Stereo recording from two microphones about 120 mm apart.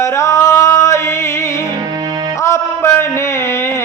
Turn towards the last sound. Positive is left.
turn(degrees=20)  # may be behind; listen again after turning